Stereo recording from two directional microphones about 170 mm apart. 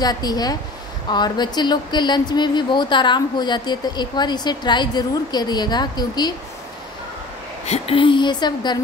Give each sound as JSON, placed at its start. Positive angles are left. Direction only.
{"t": 0.0, "sound": "speech", "side_deg": 25}
{"t": 7.6, "sound": "speech", "side_deg": 35}